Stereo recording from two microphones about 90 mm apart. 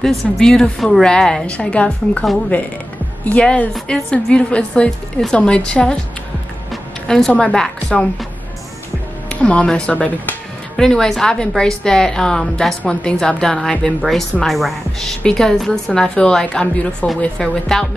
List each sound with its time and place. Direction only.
0.0 s a woman's voice: 5° left (ahead or behind)
9.3 s a woman's voice: 15° left (ahead or behind)